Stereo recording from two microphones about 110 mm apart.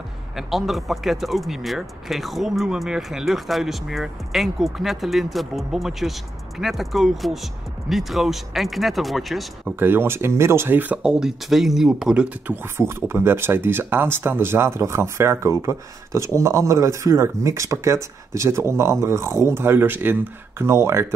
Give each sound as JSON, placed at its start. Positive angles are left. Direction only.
{"t": 0.4, "sound": "speech", "side_deg": 0}
{"t": 9.8, "sound": "speech", "side_deg": -20}
{"t": 12.7, "sound": "speech", "side_deg": -20}